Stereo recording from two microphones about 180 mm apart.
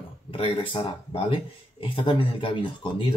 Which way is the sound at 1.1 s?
30° left (ahead or behind).